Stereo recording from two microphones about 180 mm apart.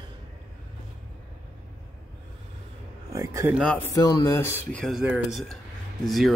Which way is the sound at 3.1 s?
15° right (ahead or behind).